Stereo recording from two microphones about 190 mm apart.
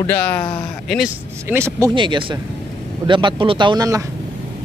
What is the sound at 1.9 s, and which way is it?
Speech, 25° right (ahead or behind).